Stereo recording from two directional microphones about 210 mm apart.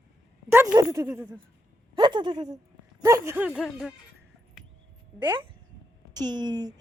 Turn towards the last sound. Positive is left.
turn(degrees=-20)  # may be behind; listen again after turning